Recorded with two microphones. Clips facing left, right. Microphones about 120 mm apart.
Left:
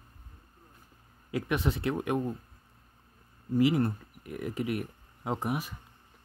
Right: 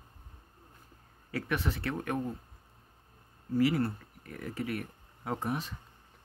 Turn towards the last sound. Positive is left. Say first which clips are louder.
# left 2 dB
turn(degrees=10)  # may be behind; listen again after turning